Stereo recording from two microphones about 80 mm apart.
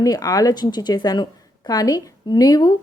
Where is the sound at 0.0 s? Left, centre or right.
Left.